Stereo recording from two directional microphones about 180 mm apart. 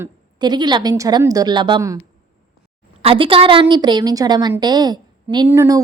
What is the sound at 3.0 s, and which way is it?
A woman's voice, 30° right (ahead or behind).